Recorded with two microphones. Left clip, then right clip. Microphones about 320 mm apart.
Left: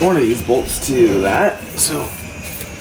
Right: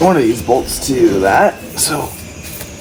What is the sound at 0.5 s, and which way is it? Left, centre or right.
Speech, centre.